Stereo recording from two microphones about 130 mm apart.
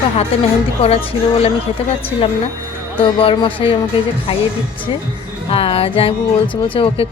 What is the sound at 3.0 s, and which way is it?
Speech, 35° left (ahead or behind).